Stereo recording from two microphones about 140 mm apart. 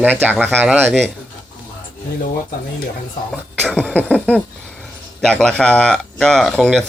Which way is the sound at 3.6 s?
10° left (ahead or behind).